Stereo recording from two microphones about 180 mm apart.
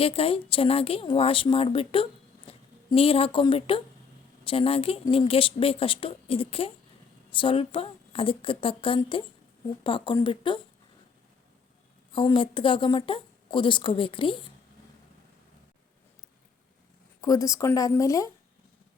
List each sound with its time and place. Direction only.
0.0 s a woman's voice: 30° left (ahead or behind)
12.1 s a woman's voice: 30° left (ahead or behind)
17.2 s speech: 20° left (ahead or behind)